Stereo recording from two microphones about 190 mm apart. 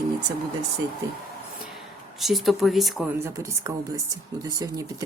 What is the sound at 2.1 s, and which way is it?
A woman's voice, centre (ahead or behind).